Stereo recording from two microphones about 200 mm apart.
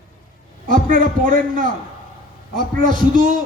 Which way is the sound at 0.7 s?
45° right (ahead or behind).